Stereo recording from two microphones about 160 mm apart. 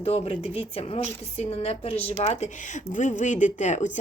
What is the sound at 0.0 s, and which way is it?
A woman's voice, 40° left (ahead or behind).